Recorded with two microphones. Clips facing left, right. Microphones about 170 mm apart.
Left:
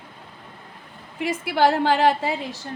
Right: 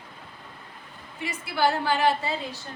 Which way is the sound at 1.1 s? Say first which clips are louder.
Left 7 dB; 90° left.